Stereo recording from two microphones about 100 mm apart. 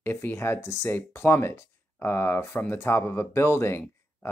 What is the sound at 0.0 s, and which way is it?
Speech, 20° left (ahead or behind).